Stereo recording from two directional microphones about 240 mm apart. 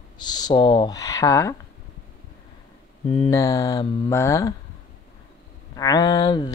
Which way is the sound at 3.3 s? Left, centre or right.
Centre.